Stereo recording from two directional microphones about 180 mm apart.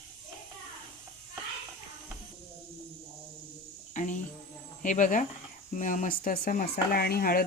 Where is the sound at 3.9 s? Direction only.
45° left (ahead or behind).